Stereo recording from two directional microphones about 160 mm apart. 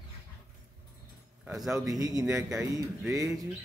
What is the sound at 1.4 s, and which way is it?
Speech, 5° right (ahead or behind).